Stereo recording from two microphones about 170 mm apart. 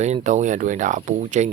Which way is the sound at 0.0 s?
40° right (ahead or behind).